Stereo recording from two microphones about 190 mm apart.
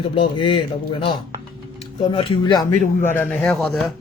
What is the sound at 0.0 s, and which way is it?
A man's voice, 25° left (ahead or behind).